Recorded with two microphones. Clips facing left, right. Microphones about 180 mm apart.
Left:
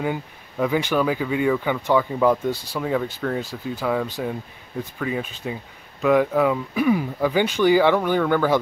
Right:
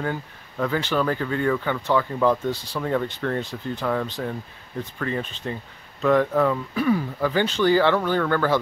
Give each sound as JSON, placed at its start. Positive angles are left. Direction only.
{"t": 0.0, "sound": "speech", "side_deg": 10}